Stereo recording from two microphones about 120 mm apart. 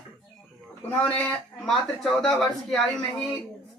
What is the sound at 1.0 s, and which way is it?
A man's voice, 10° left (ahead or behind).